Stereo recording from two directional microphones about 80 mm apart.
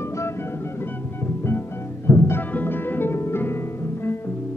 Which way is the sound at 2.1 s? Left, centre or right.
Left.